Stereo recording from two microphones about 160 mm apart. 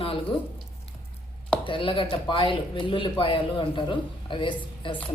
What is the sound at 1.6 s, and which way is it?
A man's voice, 30° left (ahead or behind).